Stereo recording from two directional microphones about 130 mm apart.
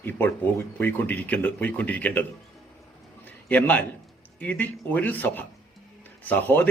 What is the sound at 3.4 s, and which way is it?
Speech, 10° left (ahead or behind).